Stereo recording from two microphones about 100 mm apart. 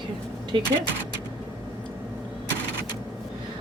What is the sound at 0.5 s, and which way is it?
Speech, 60° right (ahead or behind).